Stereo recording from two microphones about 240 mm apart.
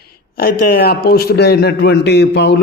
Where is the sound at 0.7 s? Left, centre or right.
Left.